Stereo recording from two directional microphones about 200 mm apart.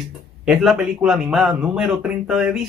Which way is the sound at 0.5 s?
Centre (ahead or behind).